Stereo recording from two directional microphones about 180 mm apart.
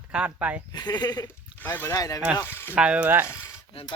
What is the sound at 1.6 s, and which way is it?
Speech, 10° left (ahead or behind).